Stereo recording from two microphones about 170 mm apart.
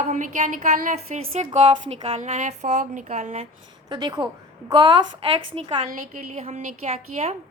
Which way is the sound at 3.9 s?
25° right (ahead or behind).